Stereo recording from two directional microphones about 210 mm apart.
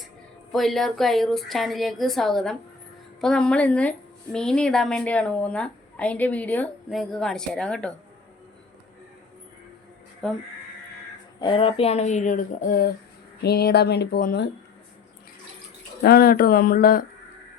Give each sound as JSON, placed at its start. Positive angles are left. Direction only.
{"t": 0.5, "sound": "a woman's voice", "side_deg": 0}
{"t": 10.2, "sound": "a woman's voice", "side_deg": 0}
{"t": 11.3, "sound": "speech", "side_deg": 25}
{"t": 16.0, "sound": "speech", "side_deg": 45}